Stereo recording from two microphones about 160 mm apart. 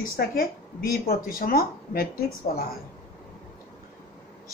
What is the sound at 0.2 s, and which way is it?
Speech, 65° left (ahead or behind).